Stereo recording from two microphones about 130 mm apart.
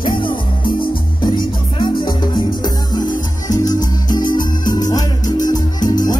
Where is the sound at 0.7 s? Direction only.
35° left (ahead or behind).